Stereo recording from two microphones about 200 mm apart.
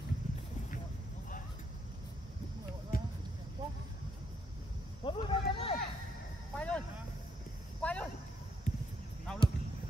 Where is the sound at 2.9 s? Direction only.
45° left (ahead or behind).